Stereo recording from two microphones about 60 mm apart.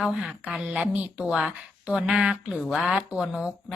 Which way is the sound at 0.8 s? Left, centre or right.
Right.